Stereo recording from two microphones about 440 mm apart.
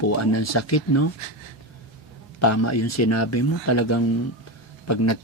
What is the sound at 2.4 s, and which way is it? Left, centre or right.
Speech, left.